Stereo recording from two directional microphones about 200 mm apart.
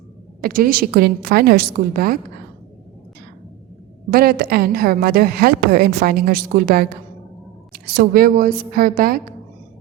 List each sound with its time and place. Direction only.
0.4 s a woman's voice: 45° right (ahead or behind)
4.1 s a woman's voice: 50° right (ahead or behind)